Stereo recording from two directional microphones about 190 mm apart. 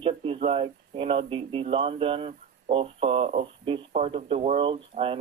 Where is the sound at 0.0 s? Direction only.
30° right (ahead or behind).